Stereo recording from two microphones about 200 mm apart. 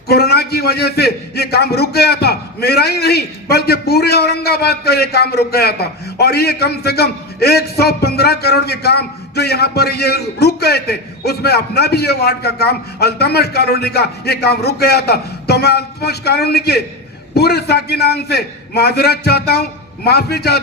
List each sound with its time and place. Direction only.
0.1 s a man's voice: 55° left (ahead or behind)